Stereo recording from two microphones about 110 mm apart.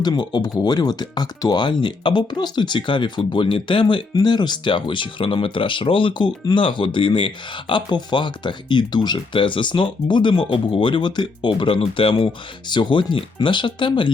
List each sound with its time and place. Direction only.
0.0 s speech: 40° left (ahead or behind)